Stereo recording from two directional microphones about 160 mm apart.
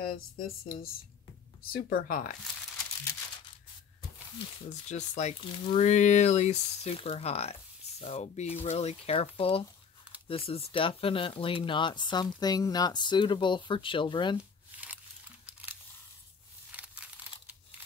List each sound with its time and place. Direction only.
0.0 s speech: 65° left (ahead or behind)
4.8 s speech: 45° left (ahead or behind)
5.4 s speech: 30° left (ahead or behind)
5.8 s speech: 45° left (ahead or behind); by 14.4 s 30° left (ahead or behind)
15.4 s a sound: 10° right (ahead or behind)